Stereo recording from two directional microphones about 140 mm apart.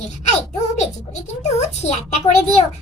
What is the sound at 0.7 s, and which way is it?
A woman's voice, 55° left (ahead or behind).